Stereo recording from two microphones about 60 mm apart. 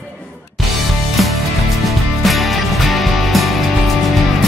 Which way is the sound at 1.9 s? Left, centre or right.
Centre.